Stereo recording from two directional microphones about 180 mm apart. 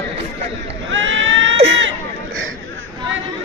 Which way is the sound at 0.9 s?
90° right.